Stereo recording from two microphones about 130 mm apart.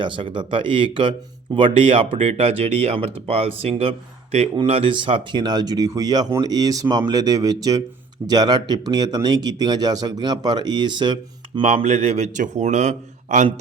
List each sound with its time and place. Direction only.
0.0 s speech: 40° right (ahead or behind)
11.8 s speech: 60° right (ahead or behind)